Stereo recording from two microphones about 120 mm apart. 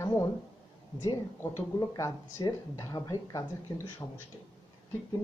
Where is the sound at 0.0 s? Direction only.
25° left (ahead or behind).